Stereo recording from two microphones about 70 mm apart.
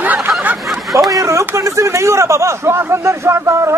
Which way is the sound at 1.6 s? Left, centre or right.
Right.